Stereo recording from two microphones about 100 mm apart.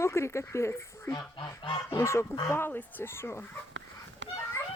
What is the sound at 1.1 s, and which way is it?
Goose, 50° left (ahead or behind).